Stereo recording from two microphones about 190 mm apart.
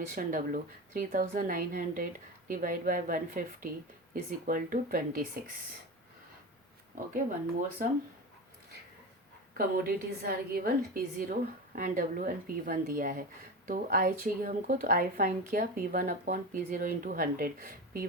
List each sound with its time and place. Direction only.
0.1 s speech: 45° right (ahead or behind)
9.6 s speech: 50° right (ahead or behind)